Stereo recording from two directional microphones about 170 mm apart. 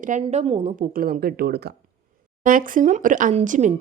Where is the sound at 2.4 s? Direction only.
50° right (ahead or behind).